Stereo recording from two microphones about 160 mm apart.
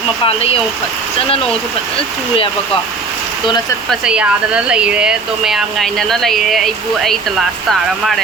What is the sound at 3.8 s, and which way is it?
Speech, 5° right (ahead or behind).